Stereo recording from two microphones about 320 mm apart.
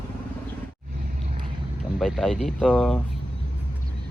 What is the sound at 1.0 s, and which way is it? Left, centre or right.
Vehicle, right.